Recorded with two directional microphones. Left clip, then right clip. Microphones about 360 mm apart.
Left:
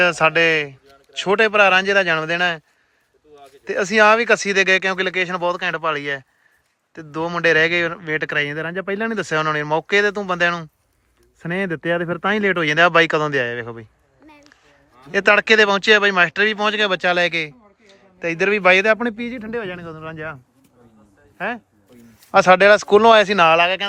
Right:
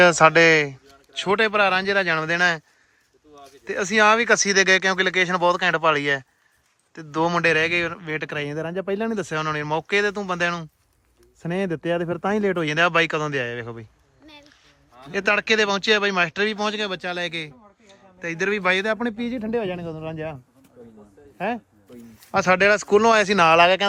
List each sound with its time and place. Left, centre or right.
0.0 s speech: centre
15.0 s speech: centre